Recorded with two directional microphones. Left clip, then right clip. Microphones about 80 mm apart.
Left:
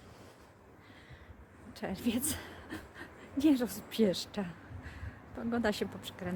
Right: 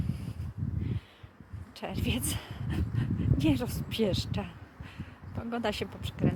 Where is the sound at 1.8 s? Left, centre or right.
Left.